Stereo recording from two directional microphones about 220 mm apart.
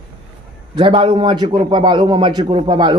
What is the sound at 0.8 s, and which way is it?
A man's voice, 25° right (ahead or behind).